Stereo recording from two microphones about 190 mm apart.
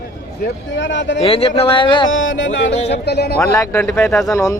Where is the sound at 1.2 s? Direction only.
30° left (ahead or behind).